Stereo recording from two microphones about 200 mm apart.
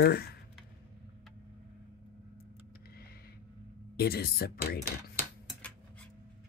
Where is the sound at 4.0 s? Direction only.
50° left (ahead or behind).